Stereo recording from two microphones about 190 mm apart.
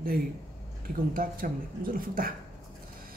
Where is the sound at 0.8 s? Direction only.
50° right (ahead or behind).